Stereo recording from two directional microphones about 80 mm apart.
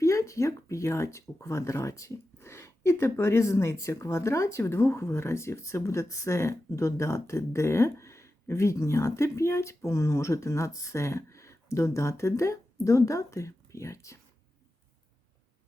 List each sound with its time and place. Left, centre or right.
0.0 s speech: left